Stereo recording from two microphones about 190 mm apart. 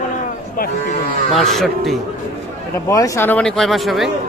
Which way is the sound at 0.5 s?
50° left (ahead or behind).